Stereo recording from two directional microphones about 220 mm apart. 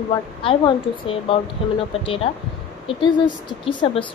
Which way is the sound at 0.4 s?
25° left (ahead or behind).